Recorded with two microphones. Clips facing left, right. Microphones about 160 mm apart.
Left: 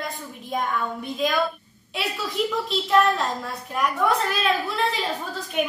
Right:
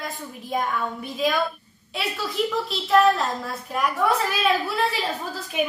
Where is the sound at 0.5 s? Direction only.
Centre (ahead or behind).